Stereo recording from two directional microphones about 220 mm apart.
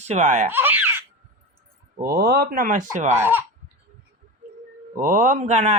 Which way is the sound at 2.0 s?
40° right (ahead or behind).